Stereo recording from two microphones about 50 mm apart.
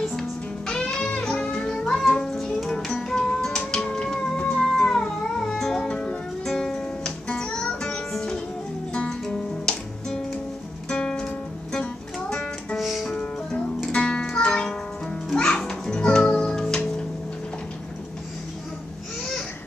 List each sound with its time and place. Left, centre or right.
0.1 s music: centre
12.7 s music: centre
13.1 s music: centre